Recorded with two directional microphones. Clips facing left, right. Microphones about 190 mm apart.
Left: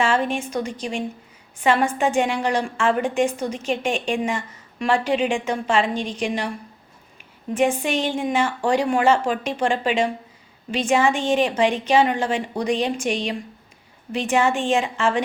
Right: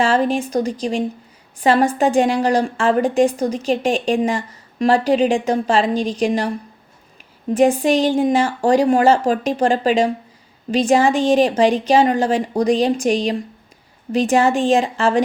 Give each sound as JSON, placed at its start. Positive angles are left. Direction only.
{"t": 0.0, "sound": "a woman's voice", "side_deg": -35}
{"t": 7.5, "sound": "a woman's voice", "side_deg": -35}